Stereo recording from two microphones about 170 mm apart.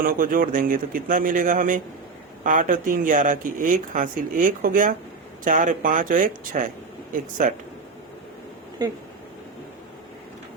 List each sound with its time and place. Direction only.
0.0 s speech: 55° right (ahead or behind)
8.8 s speech: 25° right (ahead or behind)